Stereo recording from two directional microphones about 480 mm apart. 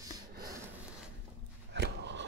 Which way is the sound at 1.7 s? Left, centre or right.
Right.